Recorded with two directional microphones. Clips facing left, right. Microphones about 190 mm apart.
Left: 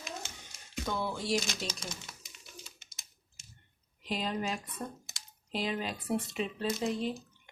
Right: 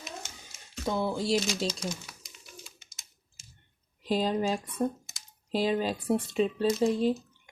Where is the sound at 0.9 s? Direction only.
25° right (ahead or behind).